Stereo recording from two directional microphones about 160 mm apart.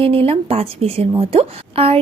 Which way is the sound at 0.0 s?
35° right (ahead or behind).